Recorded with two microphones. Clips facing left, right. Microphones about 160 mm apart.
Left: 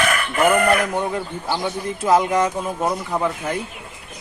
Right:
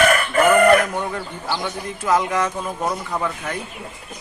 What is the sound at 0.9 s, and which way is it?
Speech, 20° left (ahead or behind).